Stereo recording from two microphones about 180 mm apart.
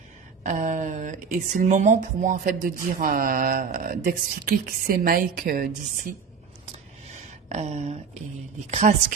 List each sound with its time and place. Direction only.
0.4 s speech: 45° right (ahead or behind)
7.1 s a sound: 40° right (ahead or behind)
8.7 s a woman's voice: 40° right (ahead or behind)